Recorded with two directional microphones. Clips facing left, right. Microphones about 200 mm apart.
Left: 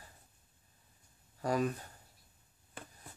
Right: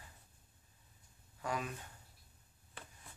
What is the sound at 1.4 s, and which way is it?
Speech, 40° left (ahead or behind).